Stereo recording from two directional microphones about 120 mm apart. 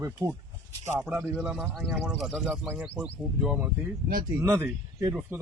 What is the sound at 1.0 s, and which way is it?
Speech, 5° right (ahead or behind).